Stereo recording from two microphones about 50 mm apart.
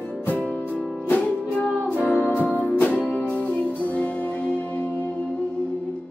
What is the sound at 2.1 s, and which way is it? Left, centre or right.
Music, left.